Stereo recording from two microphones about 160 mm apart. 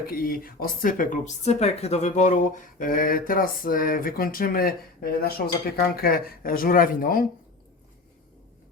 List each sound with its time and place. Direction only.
0.0 s speech: 65° left (ahead or behind)